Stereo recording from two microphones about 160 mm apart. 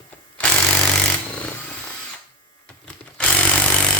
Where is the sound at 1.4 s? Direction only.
10° left (ahead or behind).